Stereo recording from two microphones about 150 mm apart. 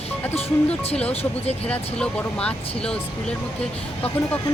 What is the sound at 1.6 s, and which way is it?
Speech, 10° left (ahead or behind).